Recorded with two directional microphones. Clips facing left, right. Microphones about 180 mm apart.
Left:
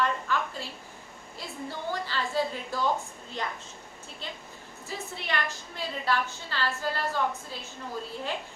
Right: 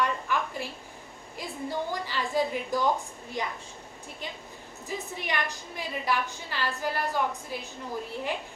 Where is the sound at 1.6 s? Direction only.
15° right (ahead or behind).